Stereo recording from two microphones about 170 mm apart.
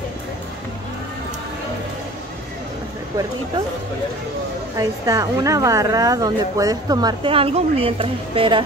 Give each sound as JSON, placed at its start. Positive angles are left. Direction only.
{"t": 4.7, "sound": "a woman's voice", "side_deg": -20}